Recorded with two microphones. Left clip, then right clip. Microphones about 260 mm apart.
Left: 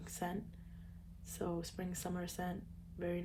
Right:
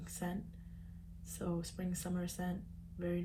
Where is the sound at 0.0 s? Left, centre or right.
Left.